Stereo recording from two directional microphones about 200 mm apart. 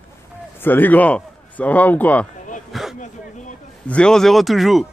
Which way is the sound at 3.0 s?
40° left (ahead or behind).